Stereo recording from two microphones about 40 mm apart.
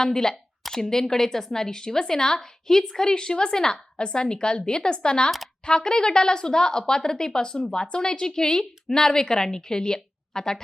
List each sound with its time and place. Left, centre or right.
0.0 s a woman's voice: centre